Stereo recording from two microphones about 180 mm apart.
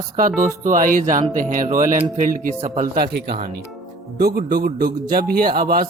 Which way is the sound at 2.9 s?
60° right (ahead or behind).